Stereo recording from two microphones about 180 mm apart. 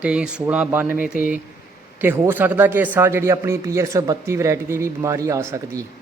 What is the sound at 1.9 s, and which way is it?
A man's voice, 10° right (ahead or behind).